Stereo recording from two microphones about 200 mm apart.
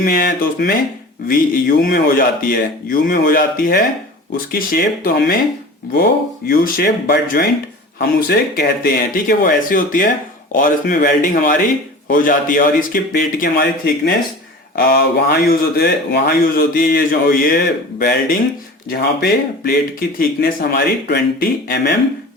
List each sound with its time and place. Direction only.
0.0 s speech: 45° left (ahead or behind)